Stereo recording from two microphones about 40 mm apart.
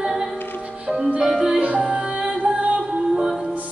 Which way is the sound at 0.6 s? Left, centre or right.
Right.